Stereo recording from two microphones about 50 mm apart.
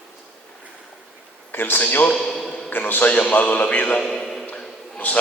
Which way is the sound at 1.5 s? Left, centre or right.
Left.